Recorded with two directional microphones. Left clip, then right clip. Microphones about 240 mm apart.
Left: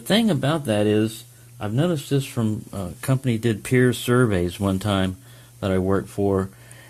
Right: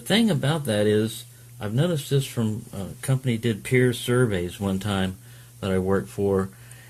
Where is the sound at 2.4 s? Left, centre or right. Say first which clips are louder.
Left 3 dB; left.